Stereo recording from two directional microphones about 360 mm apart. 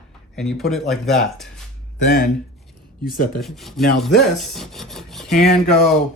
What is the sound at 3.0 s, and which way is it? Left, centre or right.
Speech, left.